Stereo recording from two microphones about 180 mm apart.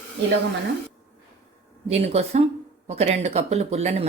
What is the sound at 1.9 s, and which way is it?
A woman's voice, 35° right (ahead or behind).